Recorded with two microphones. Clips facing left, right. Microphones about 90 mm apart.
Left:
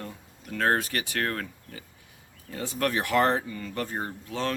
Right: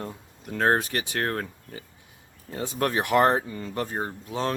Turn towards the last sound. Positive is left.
turn(degrees=-20)  # may be behind; listen again after turning